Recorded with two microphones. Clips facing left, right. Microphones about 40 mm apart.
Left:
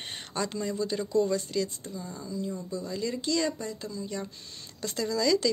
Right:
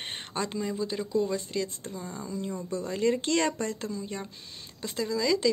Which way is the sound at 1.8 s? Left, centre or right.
Right.